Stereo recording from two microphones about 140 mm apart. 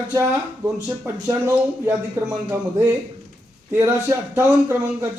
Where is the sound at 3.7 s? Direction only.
20° right (ahead or behind).